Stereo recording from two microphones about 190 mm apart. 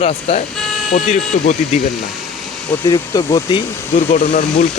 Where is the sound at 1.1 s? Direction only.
35° left (ahead or behind).